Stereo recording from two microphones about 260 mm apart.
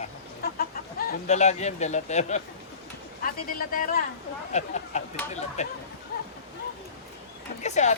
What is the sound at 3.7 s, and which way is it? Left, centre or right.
A man's voice, left.